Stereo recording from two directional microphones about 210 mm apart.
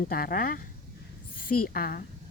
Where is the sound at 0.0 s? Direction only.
45° left (ahead or behind).